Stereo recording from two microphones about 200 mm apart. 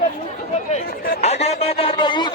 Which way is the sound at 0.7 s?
40° left (ahead or behind).